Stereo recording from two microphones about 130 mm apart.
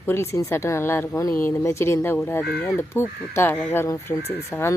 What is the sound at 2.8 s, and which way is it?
Speech, 20° left (ahead or behind).